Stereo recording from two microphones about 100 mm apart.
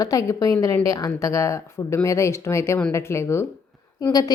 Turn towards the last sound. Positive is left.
turn(degrees=40)  # may be behind; listen again after turning